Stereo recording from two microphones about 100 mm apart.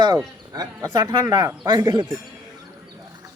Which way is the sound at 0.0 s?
40° right (ahead or behind).